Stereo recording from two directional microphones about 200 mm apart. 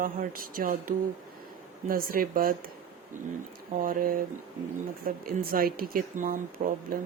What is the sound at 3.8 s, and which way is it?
Speech, 45° right (ahead or behind).